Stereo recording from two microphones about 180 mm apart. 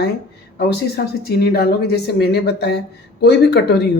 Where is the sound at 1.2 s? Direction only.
60° left (ahead or behind).